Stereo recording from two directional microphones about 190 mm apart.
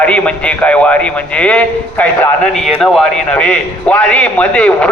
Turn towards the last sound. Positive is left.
turn(degrees=5)  # may be behind; listen again after turning